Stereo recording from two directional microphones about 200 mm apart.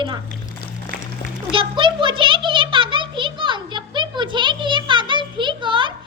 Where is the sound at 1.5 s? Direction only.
25° right (ahead or behind).